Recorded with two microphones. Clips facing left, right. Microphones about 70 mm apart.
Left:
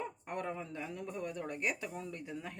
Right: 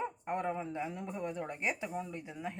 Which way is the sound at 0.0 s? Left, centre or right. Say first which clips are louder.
Right 4 dB; right.